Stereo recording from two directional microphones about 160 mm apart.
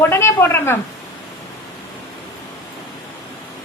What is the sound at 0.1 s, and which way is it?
Speech, 15° left (ahead or behind).